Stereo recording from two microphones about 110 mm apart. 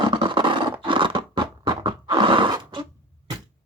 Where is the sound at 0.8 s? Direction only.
50° right (ahead or behind).